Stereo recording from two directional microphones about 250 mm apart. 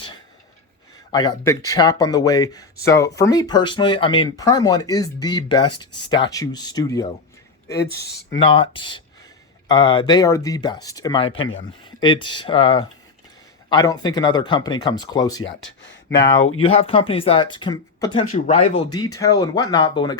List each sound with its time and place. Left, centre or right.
1.1 s speech: centre
8.0 s speech: left
8.4 s speech: centre
11.3 s speech: left
11.9 s speech: centre
15.4 s speech: left
16.6 s speech: left